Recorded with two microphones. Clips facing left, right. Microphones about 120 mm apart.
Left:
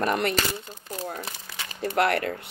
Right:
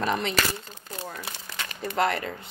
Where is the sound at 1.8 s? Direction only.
60° left (ahead or behind).